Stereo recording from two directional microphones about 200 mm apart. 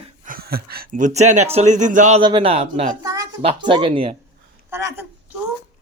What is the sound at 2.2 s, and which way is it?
Speech, 25° right (ahead or behind).